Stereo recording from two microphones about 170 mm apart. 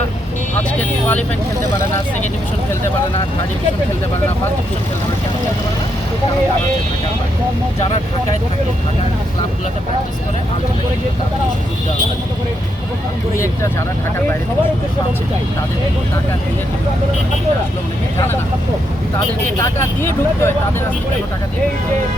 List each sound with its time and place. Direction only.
0.5 s vehicle: 10° left (ahead or behind)
13.3 s speech: 15° left (ahead or behind)
19.5 s speech: 15° left (ahead or behind)